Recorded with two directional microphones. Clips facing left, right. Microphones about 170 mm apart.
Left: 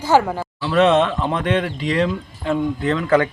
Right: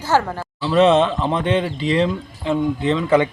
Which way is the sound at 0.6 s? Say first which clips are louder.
Right 1 dB; 30° right (ahead or behind).